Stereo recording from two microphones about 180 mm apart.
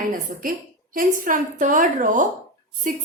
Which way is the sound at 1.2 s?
45° right (ahead or behind).